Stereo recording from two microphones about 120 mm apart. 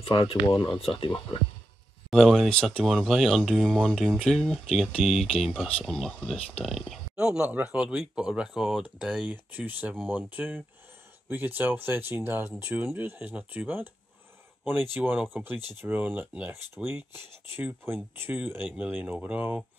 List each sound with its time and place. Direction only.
0.0 s speech: 50° left (ahead or behind)
2.0 s speech: centre (ahead or behind); by 13.8 s 15° right (ahead or behind)
15.0 s speech: 15° right (ahead or behind)